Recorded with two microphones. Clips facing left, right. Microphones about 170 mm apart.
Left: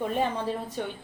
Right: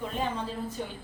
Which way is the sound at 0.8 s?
65° left (ahead or behind).